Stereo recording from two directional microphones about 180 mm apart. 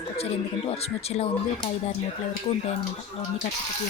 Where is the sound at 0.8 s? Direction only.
35° left (ahead or behind).